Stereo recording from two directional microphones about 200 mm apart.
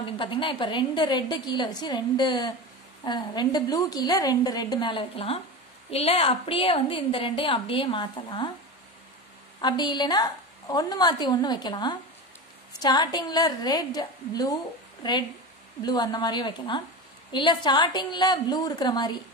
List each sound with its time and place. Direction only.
0.2 s a woman's voice: 25° left (ahead or behind)
9.6 s a woman's voice: 20° left (ahead or behind)